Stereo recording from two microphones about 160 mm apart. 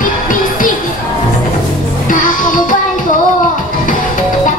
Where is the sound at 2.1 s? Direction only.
55° left (ahead or behind).